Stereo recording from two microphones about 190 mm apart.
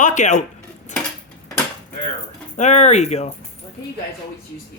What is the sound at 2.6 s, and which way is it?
Speech, 35° left (ahead or behind).